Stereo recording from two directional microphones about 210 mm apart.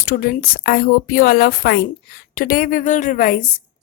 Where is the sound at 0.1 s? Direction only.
45° left (ahead or behind).